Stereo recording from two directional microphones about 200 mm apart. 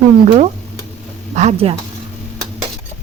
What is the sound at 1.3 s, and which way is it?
Speech, 30° right (ahead or behind).